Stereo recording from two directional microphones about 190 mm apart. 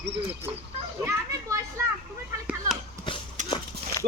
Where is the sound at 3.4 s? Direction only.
25° left (ahead or behind).